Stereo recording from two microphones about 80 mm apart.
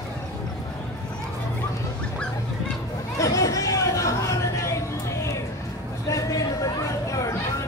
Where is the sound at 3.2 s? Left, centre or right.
Left.